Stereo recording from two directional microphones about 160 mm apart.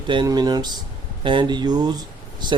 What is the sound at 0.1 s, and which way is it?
Speech, 25° right (ahead or behind).